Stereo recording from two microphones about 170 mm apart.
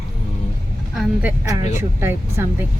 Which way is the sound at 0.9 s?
5° right (ahead or behind).